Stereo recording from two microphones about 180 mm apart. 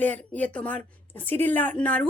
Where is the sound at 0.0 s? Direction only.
10° left (ahead or behind).